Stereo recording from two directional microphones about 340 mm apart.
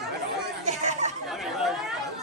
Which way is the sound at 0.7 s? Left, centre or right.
Right.